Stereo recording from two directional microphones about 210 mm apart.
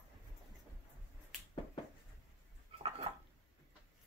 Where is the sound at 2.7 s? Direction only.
30° right (ahead or behind).